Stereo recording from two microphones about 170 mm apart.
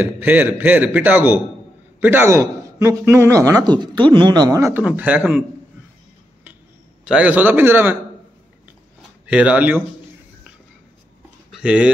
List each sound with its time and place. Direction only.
0.0 s a man's voice: 10° right (ahead or behind)
7.1 s a man's voice: 10° right (ahead or behind)
9.2 s a man's voice: 5° right (ahead or behind)
11.5 s speech: 5° right (ahead or behind)